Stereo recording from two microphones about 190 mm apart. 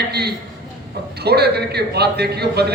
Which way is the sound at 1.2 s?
60° right (ahead or behind).